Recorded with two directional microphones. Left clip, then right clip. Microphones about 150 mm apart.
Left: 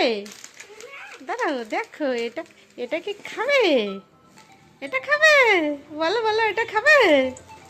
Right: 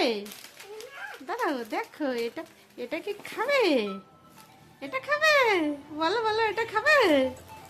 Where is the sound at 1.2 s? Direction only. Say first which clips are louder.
Left 5 dB; 15° left (ahead or behind).